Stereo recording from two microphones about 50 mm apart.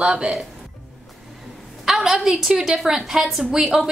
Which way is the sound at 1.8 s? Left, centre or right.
Centre.